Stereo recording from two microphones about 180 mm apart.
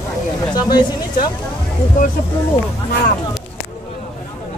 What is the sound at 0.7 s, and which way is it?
Speech, 25° left (ahead or behind).